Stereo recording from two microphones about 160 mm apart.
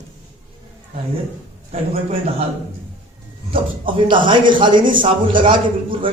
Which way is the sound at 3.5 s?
30° right (ahead or behind).